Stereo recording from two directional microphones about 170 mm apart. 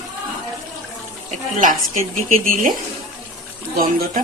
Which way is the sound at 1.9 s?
45° right (ahead or behind).